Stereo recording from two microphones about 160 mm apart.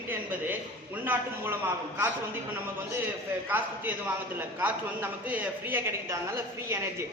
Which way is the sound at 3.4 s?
10° right (ahead or behind).